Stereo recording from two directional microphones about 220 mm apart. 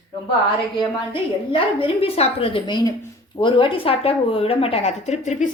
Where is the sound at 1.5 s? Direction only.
25° left (ahead or behind).